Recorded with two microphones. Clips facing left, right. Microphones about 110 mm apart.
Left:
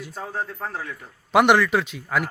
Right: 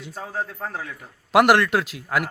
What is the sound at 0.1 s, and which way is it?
Speech, 10° right (ahead or behind).